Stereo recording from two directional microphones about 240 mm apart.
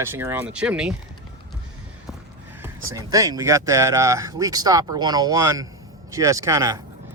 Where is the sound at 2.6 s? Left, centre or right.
Centre.